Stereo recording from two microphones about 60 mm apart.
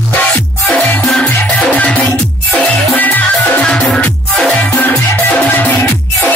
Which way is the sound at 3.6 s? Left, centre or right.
Centre.